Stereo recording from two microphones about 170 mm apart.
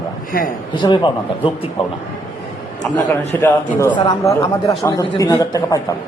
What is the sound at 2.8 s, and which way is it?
A man's voice, 10° left (ahead or behind).